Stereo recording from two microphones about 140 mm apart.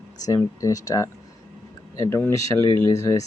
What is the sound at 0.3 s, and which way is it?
Speech, 25° left (ahead or behind).